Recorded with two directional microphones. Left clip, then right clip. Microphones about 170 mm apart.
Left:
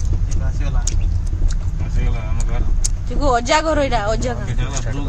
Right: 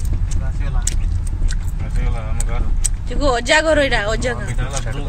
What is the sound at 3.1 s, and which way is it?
Speech, 15° left (ahead or behind).